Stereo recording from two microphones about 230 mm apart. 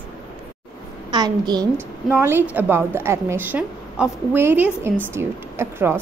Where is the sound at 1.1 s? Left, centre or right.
Centre.